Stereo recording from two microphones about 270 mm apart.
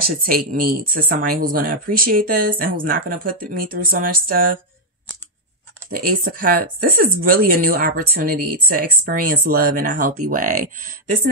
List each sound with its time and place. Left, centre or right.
0.0 s speech: right
5.9 s speech: right